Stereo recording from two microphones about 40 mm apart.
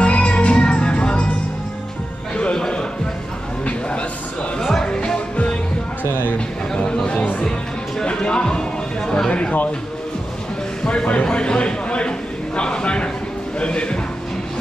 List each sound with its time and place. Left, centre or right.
0.0 s music: left
2.3 s music: left
4.6 s music: centre
4.8 s music: left
6.7 s a sound: centre
8.0 s music: left
10.9 s a sound: left
13.6 s music: left